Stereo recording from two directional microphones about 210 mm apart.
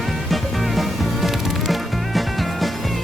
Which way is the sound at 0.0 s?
Centre (ahead or behind).